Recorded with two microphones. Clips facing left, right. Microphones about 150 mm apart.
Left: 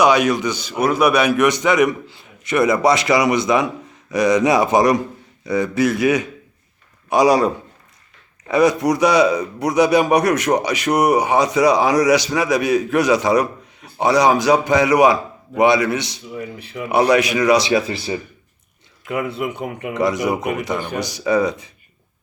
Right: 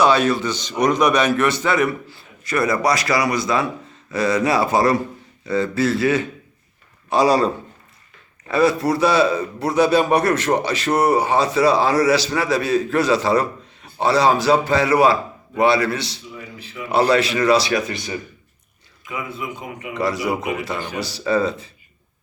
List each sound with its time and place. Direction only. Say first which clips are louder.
0.0 s a man's voice: left 1 dB; 15° left (ahead or behind); by 18.2 s 30° left (ahead or behind)
19.0 s speech: left 6 dB; 65° left (ahead or behind)
19.9 s a man's voice: left 3 dB; 20° left (ahead or behind)